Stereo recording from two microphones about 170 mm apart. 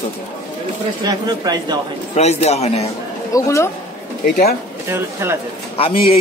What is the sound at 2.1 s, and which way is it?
Speech, 40° left (ahead or behind).